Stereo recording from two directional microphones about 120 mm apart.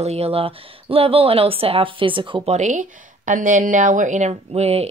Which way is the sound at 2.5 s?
90° right.